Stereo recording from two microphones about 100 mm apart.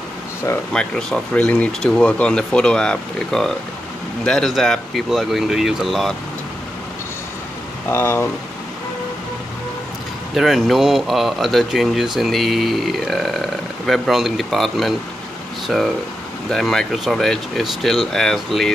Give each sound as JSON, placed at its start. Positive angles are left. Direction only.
{"t": 0.7, "sound": "speech", "side_deg": 10}
{"t": 7.9, "sound": "speech", "side_deg": 25}
{"t": 10.3, "sound": "speech", "side_deg": 0}